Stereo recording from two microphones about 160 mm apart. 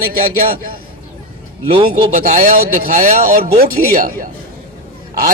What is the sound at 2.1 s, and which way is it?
A man's voice, 55° right (ahead or behind).